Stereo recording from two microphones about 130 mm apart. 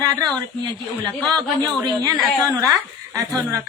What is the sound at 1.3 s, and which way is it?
Speech, 30° right (ahead or behind).